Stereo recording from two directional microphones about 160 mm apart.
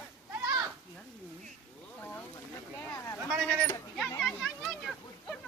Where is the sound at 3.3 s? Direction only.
Centre (ahead or behind).